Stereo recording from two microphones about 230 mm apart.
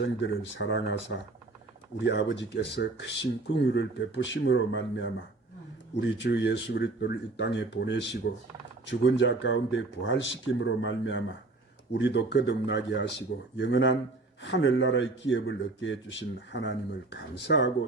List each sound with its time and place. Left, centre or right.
0.0 s speech: left